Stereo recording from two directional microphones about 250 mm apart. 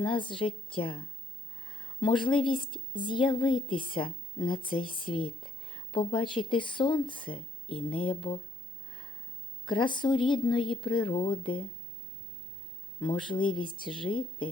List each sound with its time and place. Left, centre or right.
0.0 s speech: centre
9.6 s speech: centre
13.0 s speech: centre